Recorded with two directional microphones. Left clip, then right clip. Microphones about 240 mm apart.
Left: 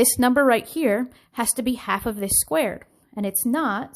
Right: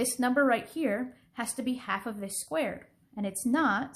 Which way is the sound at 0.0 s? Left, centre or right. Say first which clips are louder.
Left 9 dB; left.